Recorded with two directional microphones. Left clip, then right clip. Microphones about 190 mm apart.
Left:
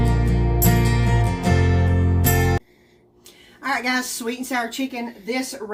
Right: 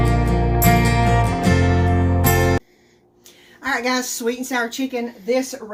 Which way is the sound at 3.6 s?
25° right (ahead or behind).